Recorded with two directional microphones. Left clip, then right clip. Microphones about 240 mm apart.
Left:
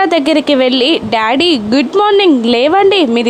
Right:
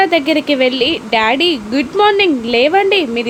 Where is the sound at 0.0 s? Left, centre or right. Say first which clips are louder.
Left 2 dB; centre.